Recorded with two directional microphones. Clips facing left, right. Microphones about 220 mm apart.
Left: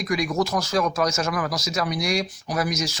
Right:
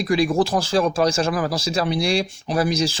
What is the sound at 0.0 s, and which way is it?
Speech, 30° right (ahead or behind).